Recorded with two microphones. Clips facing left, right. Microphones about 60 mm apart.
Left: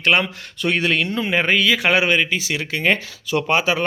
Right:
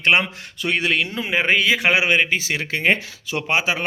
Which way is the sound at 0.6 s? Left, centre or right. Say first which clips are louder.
Left 1 dB; centre.